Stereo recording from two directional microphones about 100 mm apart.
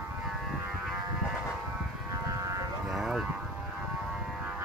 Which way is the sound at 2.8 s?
5° right (ahead or behind).